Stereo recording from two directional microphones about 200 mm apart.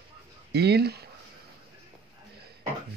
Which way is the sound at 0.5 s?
55° right (ahead or behind).